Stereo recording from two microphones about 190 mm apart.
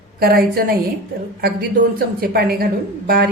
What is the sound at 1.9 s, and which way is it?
Speech, 55° right (ahead or behind).